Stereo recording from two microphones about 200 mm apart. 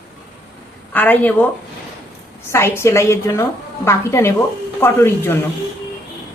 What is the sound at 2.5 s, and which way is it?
A woman's voice, 10° left (ahead or behind).